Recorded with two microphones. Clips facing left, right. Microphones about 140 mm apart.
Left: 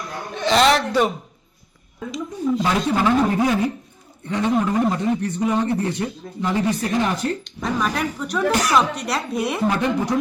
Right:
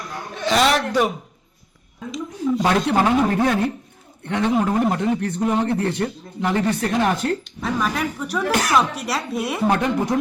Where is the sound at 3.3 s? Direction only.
10° left (ahead or behind).